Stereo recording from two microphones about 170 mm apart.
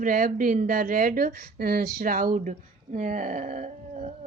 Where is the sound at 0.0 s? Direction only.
55° right (ahead or behind).